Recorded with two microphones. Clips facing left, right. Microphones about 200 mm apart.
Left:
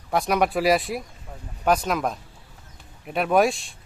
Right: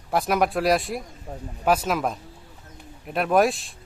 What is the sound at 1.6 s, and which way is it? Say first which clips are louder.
Speech: even; 5° right (ahead or behind).